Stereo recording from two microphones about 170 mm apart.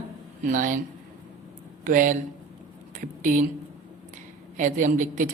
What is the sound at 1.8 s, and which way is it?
Speech, 55° right (ahead or behind).